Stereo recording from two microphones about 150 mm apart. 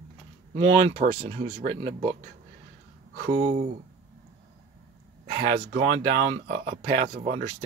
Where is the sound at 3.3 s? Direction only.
50° right (ahead or behind).